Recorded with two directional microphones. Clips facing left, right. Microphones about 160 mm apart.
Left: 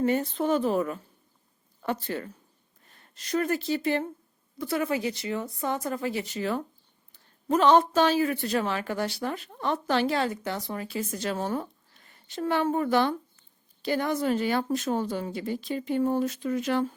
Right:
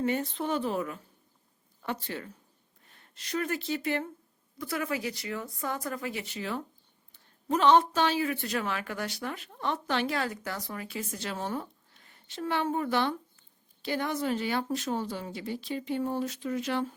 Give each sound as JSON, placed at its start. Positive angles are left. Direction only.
{"t": 0.0, "sound": "speech", "side_deg": 40}